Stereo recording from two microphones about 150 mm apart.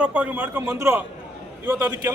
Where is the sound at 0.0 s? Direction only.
10° right (ahead or behind).